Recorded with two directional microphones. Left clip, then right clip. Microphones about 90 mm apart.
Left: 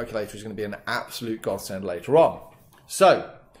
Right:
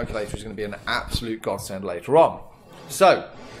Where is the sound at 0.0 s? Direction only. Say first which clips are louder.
Right 1 dB; 10° right (ahead or behind).